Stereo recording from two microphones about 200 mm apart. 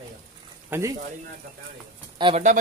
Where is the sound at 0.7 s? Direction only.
15° right (ahead or behind).